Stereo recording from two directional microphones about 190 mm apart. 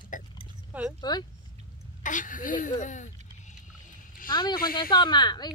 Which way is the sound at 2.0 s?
45° left (ahead or behind).